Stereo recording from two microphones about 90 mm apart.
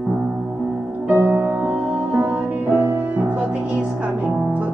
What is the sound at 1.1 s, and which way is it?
Music, 25° right (ahead or behind).